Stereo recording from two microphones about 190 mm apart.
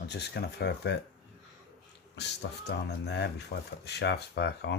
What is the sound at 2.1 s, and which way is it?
Speech, 60° left (ahead or behind).